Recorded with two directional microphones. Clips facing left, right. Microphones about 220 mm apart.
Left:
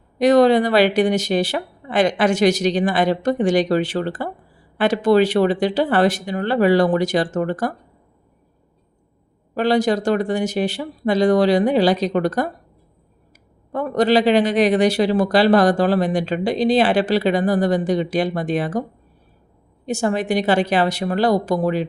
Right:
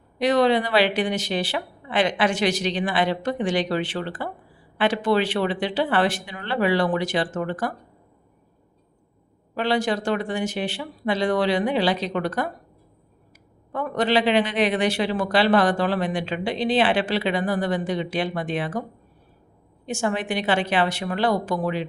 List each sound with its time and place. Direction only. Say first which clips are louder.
0.2 s speech: left 6 dB; 45° left (ahead or behind)
9.6 s speech: left 6 dB; 40° left (ahead or behind)
13.7 s speech: left 5 dB; 40° left (ahead or behind)